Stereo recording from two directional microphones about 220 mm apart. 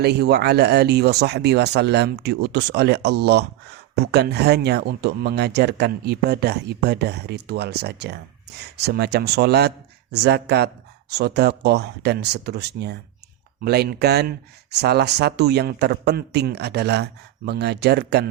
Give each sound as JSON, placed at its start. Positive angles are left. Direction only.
{"t": 0.0, "sound": "speech", "side_deg": -50}